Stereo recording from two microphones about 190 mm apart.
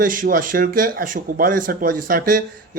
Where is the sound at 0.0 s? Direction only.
45° right (ahead or behind).